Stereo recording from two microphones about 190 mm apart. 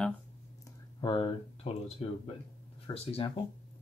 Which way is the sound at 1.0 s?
25° left (ahead or behind).